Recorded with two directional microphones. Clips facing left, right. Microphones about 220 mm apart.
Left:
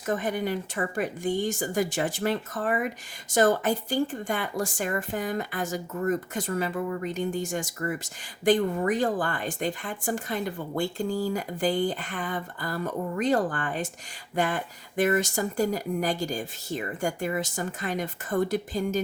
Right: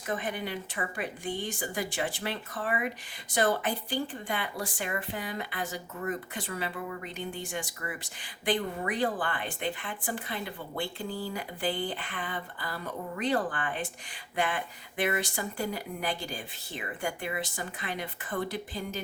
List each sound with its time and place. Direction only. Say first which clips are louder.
0.0 s speech: left 6 dB; 45° left (ahead or behind)